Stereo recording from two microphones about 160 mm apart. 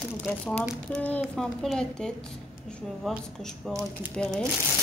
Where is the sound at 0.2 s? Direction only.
Centre (ahead or behind).